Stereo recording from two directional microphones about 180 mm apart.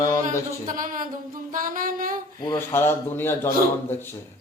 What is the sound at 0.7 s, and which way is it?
Music, 45° right (ahead or behind).